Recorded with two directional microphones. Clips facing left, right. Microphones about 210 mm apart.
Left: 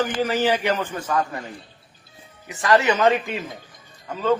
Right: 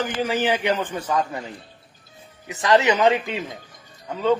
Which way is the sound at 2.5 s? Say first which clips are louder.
Right 1 dB; 20° right (ahead or behind).